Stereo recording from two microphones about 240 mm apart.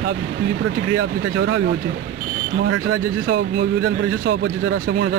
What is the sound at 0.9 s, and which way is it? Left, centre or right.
Speech, right.